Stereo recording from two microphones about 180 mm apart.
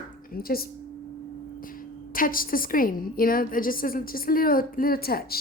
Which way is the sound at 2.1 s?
50° left (ahead or behind).